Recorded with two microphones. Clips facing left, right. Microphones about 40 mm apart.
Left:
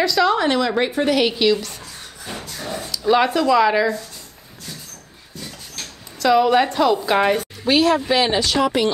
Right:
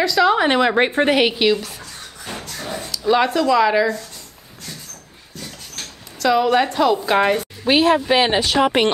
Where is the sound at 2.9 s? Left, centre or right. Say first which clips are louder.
Even; centre.